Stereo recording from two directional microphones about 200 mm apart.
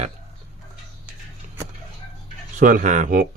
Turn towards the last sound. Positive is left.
turn(degrees=-40)  # may be behind; listen again after turning